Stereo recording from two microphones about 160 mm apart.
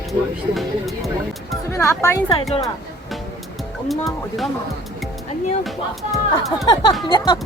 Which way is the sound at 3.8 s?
Centre (ahead or behind).